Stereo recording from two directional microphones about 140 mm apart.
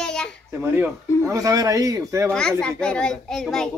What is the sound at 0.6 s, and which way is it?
Speech, 15° right (ahead or behind).